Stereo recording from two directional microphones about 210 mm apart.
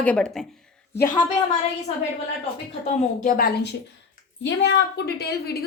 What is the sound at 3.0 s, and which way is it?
A woman's voice, 40° left (ahead or behind).